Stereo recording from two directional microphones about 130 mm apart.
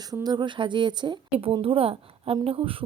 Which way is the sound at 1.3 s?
45° right (ahead or behind).